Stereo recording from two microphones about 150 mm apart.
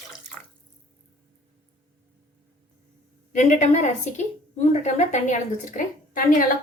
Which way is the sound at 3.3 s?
55° left (ahead or behind).